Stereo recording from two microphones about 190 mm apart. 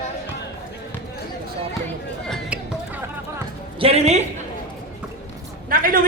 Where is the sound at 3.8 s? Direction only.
30° right (ahead or behind).